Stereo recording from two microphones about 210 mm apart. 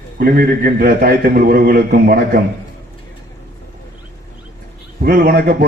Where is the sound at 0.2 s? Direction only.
45° right (ahead or behind).